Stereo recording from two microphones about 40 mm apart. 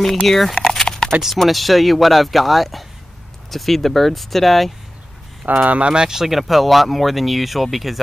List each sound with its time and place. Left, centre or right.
0.0 s a sound: centre
1.4 s speech: centre
5.6 s speech: right
5.9 s speech: centre
6.2 s speech: centre